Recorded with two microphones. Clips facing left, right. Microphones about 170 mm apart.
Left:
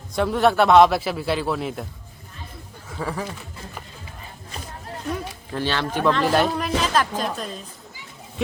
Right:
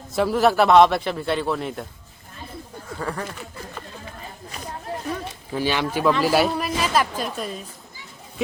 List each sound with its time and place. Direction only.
0.2 s a man's voice: centre (ahead or behind)
3.0 s a man's voice: 5° left (ahead or behind)
5.5 s speech: 10° right (ahead or behind)